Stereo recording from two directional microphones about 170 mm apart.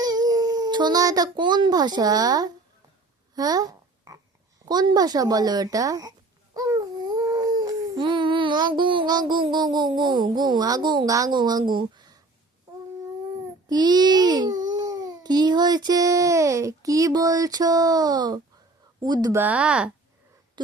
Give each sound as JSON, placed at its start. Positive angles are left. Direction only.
{"t": 0.0, "sound": "a child's voice", "side_deg": -20}
{"t": 3.3, "sound": "babbling", "side_deg": -20}
{"t": 4.7, "sound": "speech", "side_deg": -25}
{"t": 13.7, "sound": "a child's voice", "side_deg": -25}